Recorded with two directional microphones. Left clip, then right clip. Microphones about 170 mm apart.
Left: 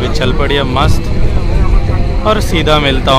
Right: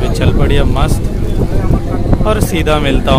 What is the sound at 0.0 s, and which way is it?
Speech, 25° right (ahead or behind).